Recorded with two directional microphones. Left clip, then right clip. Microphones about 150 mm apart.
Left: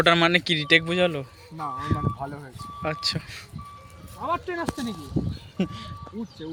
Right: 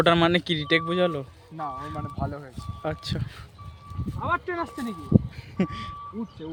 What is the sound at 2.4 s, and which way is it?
Speech, 20° right (ahead or behind).